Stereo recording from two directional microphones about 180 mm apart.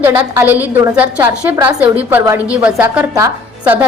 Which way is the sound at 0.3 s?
10° right (ahead or behind).